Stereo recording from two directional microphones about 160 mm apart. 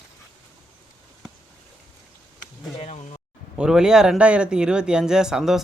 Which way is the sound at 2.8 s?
45° left (ahead or behind).